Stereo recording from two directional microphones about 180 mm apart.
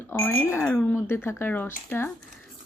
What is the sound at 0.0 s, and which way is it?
Speech, 15° left (ahead or behind).